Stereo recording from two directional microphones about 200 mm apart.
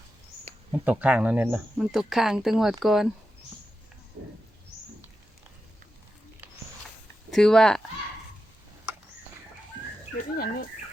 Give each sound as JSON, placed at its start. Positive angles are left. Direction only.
{"t": 0.7, "sound": "speech", "side_deg": -5}
{"t": 7.3, "sound": "speech", "side_deg": 0}
{"t": 10.2, "sound": "speech", "side_deg": 50}